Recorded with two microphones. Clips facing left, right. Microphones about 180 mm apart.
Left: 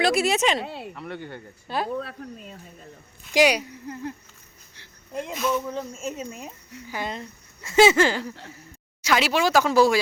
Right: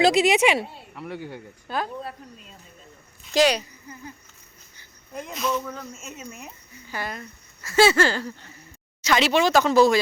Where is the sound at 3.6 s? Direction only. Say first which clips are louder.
Left 8 dB; 65° left (ahead or behind).